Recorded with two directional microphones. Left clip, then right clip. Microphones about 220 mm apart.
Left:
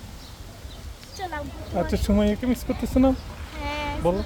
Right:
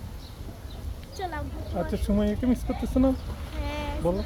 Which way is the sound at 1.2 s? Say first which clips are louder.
Left 2 dB; 5° right (ahead or behind).